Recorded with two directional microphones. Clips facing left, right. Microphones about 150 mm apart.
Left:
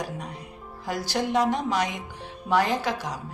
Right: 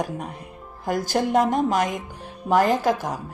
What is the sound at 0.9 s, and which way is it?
A woman's voice, 50° right (ahead or behind).